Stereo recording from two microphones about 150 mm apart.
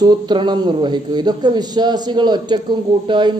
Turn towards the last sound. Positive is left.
turn(degrees=-30)  # may be behind; listen again after turning